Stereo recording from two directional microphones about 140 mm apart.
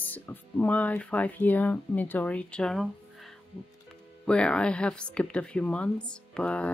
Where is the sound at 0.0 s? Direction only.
15° left (ahead or behind).